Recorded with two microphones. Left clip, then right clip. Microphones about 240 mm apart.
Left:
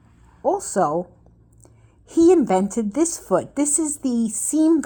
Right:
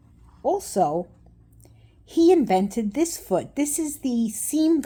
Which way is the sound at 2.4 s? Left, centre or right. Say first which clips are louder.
Left 2 dB; centre.